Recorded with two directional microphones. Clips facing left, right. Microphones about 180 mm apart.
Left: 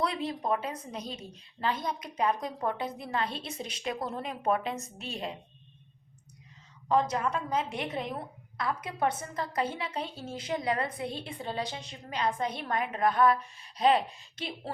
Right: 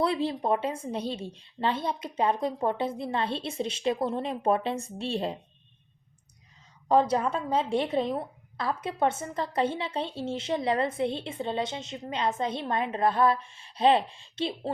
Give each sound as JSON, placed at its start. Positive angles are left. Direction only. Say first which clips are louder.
{"t": 0.0, "sound": "a woman's voice", "louder": "right 5 dB", "side_deg": -30}
{"t": 6.8, "sound": "a woman's voice", "louder": "right 4 dB", "side_deg": -30}